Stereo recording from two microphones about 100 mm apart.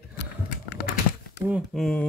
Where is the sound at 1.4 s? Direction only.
15° right (ahead or behind).